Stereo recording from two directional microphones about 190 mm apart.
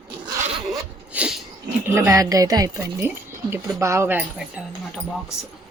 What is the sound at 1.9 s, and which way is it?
Speech, 15° right (ahead or behind).